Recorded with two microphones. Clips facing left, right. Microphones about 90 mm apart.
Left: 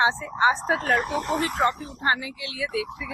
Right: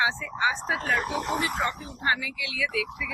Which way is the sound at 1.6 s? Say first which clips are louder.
Left 5 dB; 35° left (ahead or behind).